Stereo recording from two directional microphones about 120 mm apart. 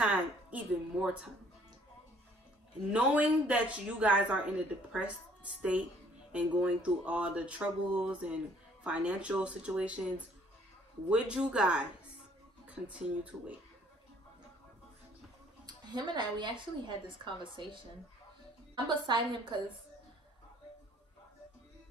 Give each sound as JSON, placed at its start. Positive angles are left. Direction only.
{"t": 0.0, "sound": "a woman's voice", "side_deg": -10}
{"t": 2.9, "sound": "speech", "side_deg": -10}
{"t": 15.6, "sound": "a woman's voice", "side_deg": -35}
{"t": 18.9, "sound": "a woman's voice", "side_deg": -40}